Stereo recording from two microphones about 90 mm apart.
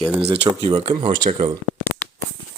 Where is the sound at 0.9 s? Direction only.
65° right (ahead or behind).